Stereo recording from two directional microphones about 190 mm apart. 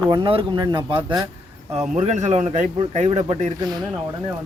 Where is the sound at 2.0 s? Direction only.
35° right (ahead or behind).